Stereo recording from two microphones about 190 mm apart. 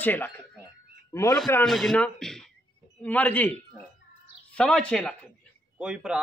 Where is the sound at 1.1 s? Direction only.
15° left (ahead or behind).